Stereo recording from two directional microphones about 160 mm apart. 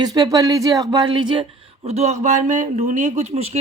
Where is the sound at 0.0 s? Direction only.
25° right (ahead or behind).